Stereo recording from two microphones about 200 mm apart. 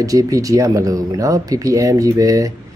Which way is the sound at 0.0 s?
15° right (ahead or behind).